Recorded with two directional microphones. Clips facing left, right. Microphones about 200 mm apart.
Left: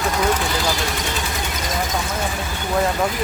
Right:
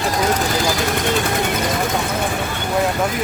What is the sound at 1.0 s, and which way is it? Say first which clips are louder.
Speech: right 7 dB; 60° right (ahead or behind).